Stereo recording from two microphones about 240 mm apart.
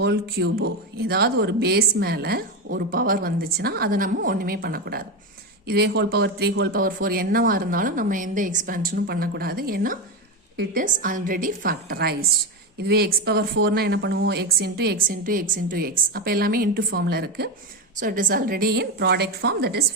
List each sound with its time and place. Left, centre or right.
0.0 s speech: right